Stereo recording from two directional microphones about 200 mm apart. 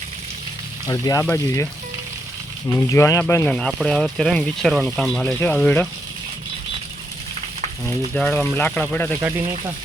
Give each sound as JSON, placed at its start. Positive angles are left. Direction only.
{"t": 0.9, "sound": "speech", "side_deg": 15}
{"t": 2.6, "sound": "speech", "side_deg": 15}
{"t": 8.1, "sound": "speech", "side_deg": 5}